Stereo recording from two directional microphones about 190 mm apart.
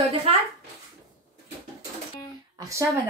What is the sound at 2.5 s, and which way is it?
Speech, 15° right (ahead or behind).